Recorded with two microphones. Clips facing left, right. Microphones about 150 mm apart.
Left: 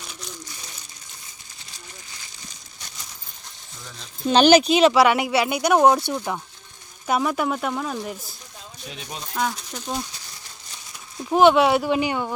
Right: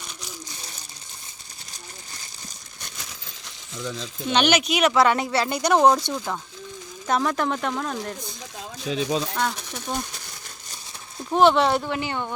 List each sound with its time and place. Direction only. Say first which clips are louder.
2.8 s coin: right 3 dB; 85° right
4.3 s speech: left 6 dB; 35° left (ahead or behind)
4.9 s speech: left 2 dB; 10° left (ahead or behind)
8.5 s rattle: right 12 dB; 90° right
9.3 s speech: even; 5° left (ahead or behind)
11.3 s speech: left 2 dB; 5° left (ahead or behind)
11.9 s speech: left 5 dB; 15° left (ahead or behind)